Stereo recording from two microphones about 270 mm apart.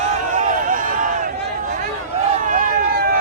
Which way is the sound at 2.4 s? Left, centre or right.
Right.